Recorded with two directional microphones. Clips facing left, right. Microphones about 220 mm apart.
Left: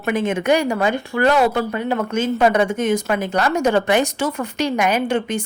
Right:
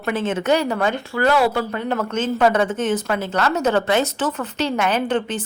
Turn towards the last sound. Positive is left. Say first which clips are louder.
# left 1 dB
turn(degrees=10)  # may be behind; listen again after turning